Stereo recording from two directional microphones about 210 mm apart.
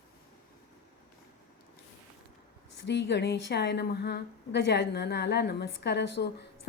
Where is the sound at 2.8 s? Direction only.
55° left (ahead or behind).